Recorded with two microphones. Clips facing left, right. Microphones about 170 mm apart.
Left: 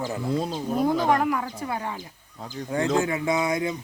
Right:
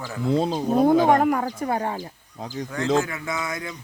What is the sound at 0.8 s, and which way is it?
Speech, 55° right (ahead or behind).